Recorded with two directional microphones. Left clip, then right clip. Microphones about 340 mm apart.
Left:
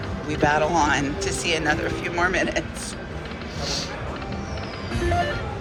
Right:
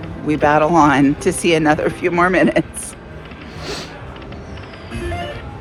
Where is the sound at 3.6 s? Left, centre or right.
Centre.